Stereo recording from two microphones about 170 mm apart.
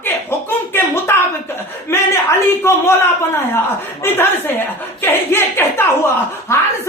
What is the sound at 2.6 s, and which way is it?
Speech, 15° left (ahead or behind).